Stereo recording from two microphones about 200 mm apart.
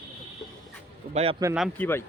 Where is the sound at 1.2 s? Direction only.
30° right (ahead or behind).